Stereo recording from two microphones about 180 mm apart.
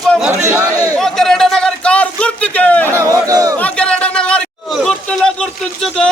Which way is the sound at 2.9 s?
20° right (ahead or behind).